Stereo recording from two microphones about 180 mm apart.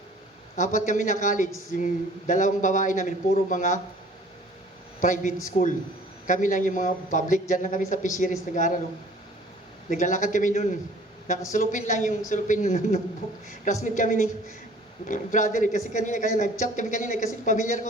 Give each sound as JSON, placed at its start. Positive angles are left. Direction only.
{"t": 0.5, "sound": "speech", "side_deg": 45}
{"t": 4.9, "sound": "a man's voice", "side_deg": 45}
{"t": 9.9, "sound": "speech", "side_deg": 45}